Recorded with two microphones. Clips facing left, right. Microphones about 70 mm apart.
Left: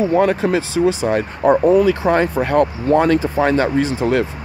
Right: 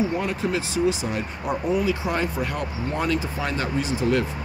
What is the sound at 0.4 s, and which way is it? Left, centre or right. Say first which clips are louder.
Speech: left 7 dB; left.